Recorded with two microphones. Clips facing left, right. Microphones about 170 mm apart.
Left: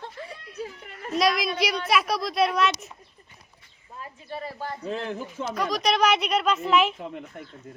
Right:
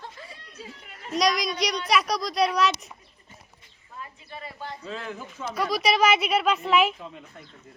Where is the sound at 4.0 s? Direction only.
40° left (ahead or behind).